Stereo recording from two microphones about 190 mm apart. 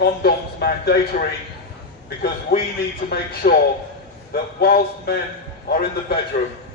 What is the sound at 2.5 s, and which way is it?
A man's voice, 55° left (ahead or behind).